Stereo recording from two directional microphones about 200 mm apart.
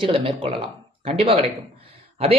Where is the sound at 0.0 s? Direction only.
25° right (ahead or behind).